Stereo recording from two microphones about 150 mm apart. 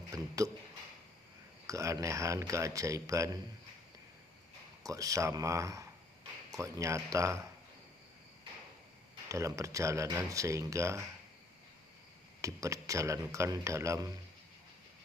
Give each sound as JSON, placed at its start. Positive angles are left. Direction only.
{"t": 0.1, "sound": "a man's voice", "side_deg": -20}
{"t": 1.6, "sound": "a man's voice", "side_deg": -20}
{"t": 4.8, "sound": "a man's voice", "side_deg": -25}
{"t": 9.3, "sound": "a man's voice", "side_deg": -20}
{"t": 12.4, "sound": "a man's voice", "side_deg": -20}